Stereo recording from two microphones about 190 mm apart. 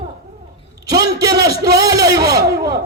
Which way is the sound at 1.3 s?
20° right (ahead or behind).